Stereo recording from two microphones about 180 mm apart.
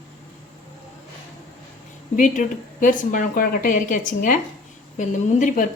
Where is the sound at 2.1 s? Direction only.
45° left (ahead or behind).